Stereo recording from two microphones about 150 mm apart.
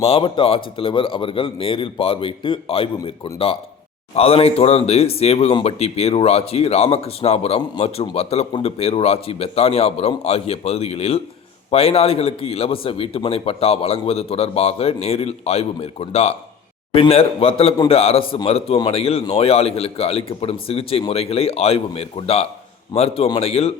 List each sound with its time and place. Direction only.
0.0 s a man's voice: 40° left (ahead or behind)